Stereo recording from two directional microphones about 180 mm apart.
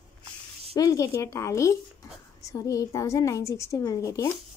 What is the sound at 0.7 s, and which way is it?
A woman's voice, 20° left (ahead or behind).